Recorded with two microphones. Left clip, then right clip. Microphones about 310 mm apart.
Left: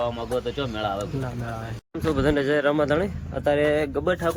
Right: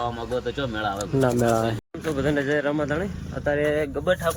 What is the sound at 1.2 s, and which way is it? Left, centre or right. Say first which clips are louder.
Speech: right 13 dB; right.